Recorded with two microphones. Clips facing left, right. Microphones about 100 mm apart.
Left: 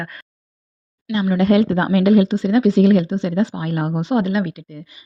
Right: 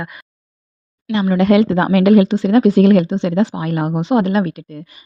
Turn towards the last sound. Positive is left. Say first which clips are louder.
# right 4 dB
turn(degrees=-55)  # may be behind; listen again after turning